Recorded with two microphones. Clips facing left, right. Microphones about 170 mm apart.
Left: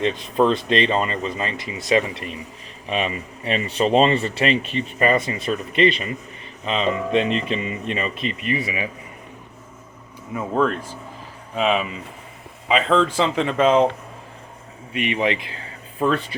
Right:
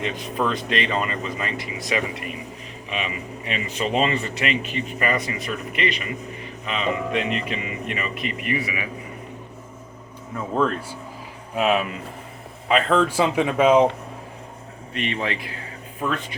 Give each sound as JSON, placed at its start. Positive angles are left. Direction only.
{"t": 0.0, "sound": "speech", "side_deg": 30}
{"t": 2.9, "sound": "speech", "side_deg": 35}
{"t": 10.3, "sound": "speech", "side_deg": 0}
{"t": 14.9, "sound": "speech", "side_deg": 10}
{"t": 16.0, "sound": "speech", "side_deg": 35}